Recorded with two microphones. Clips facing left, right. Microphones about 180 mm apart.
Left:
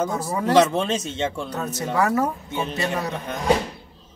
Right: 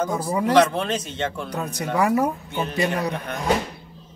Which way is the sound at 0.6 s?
20° left (ahead or behind).